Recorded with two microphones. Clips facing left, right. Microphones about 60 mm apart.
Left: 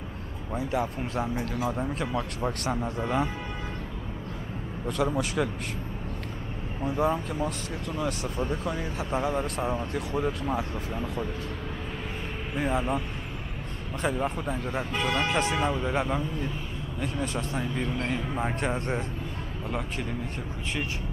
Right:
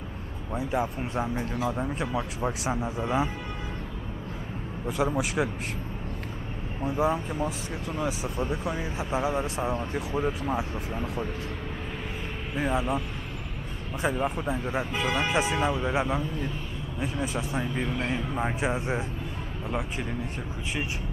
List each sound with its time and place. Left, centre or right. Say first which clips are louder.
0.6 s speech: even; centre
4.8 s speech: even; centre
6.8 s speech: even; centre
12.5 s speech: even; centre
14.0 s speech: right 1 dB; centre